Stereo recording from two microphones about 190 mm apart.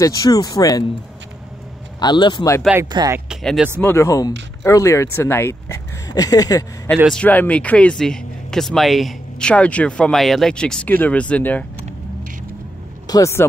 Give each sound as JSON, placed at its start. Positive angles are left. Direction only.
{"t": 0.0, "sound": "speech", "side_deg": 20}
{"t": 2.0, "sound": "speech", "side_deg": 20}
{"t": 2.7, "sound": "speech", "side_deg": -20}
{"t": 3.3, "sound": "speech", "side_deg": 0}
{"t": 3.8, "sound": "speech", "side_deg": 15}
{"t": 7.1, "sound": "speech", "side_deg": 5}
{"t": 13.0, "sound": "speech", "side_deg": 20}